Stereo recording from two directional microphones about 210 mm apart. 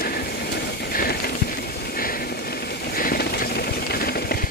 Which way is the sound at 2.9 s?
45° left (ahead or behind).